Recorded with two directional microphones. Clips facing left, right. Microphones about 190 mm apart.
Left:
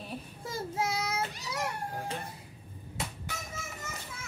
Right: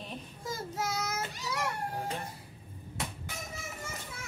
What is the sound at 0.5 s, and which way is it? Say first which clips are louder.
Child singing: left 2 dB; 30° left (ahead or behind).